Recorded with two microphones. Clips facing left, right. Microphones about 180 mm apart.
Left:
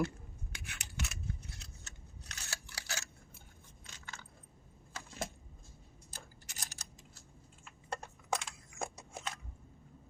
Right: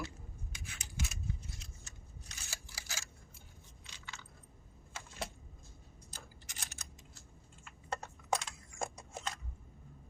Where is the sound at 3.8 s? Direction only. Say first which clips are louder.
Left 1 dB; 45° left (ahead or behind).